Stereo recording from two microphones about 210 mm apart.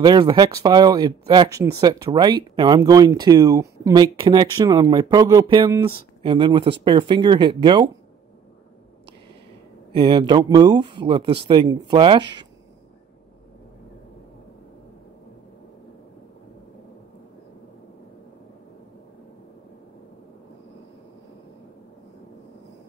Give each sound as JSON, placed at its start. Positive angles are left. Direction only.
{"t": 0.0, "sound": "speech", "side_deg": -20}
{"t": 9.9, "sound": "speech", "side_deg": -25}